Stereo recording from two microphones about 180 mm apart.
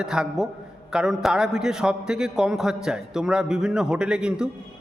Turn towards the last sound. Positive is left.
turn(degrees=-5)  # may be behind; listen again after turning